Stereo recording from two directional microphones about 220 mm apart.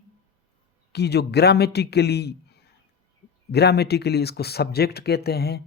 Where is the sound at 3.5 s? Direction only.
50° left (ahead or behind).